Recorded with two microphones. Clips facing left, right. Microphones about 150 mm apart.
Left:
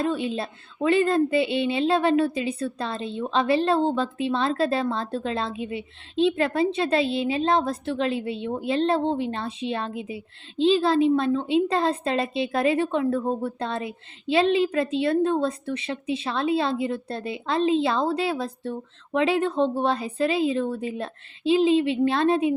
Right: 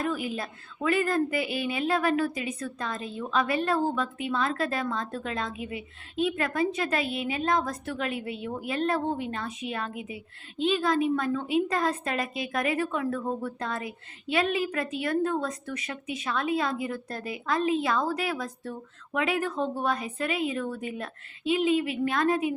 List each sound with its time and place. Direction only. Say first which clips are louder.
0.0 s a woman's voice: left 5 dB; 25° left (ahead or behind)